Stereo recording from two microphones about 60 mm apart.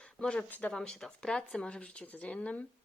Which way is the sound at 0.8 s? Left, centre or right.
Centre.